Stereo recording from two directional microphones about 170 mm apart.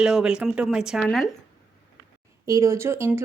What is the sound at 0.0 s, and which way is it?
Speech, 5° right (ahead or behind).